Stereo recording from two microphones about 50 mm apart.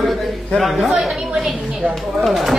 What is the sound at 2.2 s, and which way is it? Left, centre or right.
Speech, centre.